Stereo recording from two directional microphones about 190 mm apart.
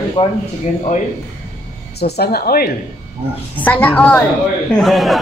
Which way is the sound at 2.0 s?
60° left (ahead or behind).